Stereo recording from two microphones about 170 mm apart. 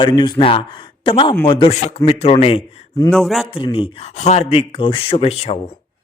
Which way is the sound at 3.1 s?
Centre (ahead or behind).